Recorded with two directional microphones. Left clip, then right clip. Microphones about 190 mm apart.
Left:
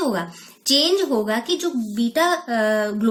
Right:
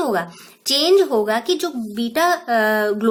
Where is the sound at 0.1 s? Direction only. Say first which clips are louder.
Right 4 dB; 30° right (ahead or behind).